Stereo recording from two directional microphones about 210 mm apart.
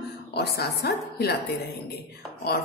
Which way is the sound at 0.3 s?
50° left (ahead or behind).